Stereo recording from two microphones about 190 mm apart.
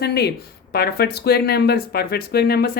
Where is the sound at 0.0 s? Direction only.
60° left (ahead or behind).